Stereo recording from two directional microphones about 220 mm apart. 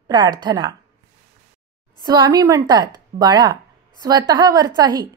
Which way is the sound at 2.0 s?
20° right (ahead or behind).